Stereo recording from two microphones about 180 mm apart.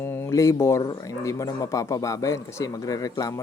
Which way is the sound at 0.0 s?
15° left (ahead or behind).